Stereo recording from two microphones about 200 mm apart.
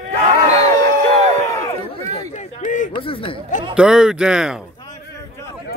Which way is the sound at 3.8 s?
5° right (ahead or behind).